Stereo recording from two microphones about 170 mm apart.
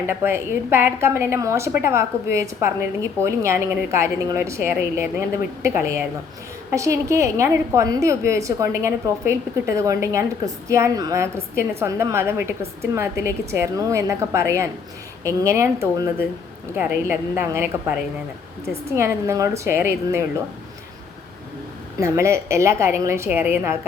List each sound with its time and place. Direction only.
0.1 s a woman's voice: 15° right (ahead or behind)
21.9 s a woman's voice: 15° right (ahead or behind)